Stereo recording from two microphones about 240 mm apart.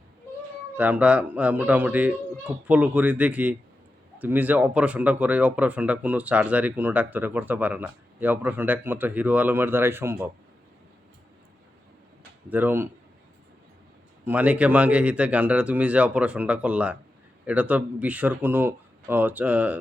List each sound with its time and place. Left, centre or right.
0.8 s speech: centre
12.5 s speech: centre
14.3 s speech: centre